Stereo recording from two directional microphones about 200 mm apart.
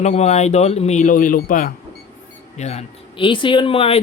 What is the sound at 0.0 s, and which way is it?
Speech, 35° left (ahead or behind).